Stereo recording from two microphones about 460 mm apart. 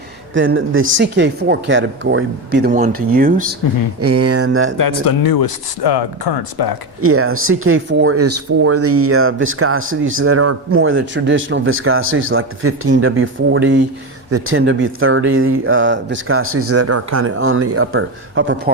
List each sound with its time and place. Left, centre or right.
0.3 s speech: right
4.0 s speech: right
4.8 s speech: left
7.0 s speech: right